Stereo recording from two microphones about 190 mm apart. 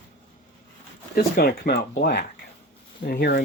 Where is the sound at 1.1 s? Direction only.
50° left (ahead or behind).